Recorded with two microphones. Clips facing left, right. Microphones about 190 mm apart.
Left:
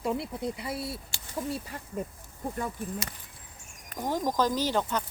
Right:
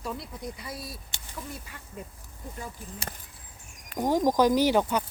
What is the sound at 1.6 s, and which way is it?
Speech, 40° left (ahead or behind).